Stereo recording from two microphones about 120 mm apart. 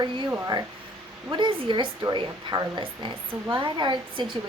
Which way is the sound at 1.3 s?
45° right (ahead or behind).